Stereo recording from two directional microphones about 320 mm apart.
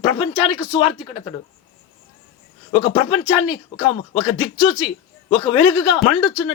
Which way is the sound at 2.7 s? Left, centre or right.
Centre.